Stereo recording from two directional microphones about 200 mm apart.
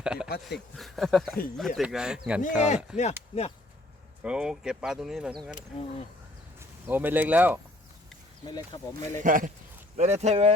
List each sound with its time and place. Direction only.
0.0 s a sound: 5° right (ahead or behind)
0.8 s speech: centre (ahead or behind)
2.4 s speech: 35° left (ahead or behind)
4.2 s speech: 5° right (ahead or behind)
6.6 s speech: 10° right (ahead or behind)
8.4 s speech: 20° left (ahead or behind)
9.1 s speech: 40° right (ahead or behind)